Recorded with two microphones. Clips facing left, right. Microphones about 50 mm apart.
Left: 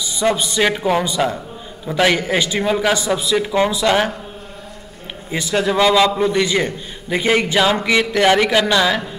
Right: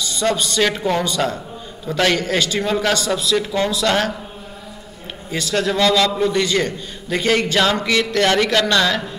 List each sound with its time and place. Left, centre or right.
0.0 s a man's voice: centre
5.3 s a man's voice: centre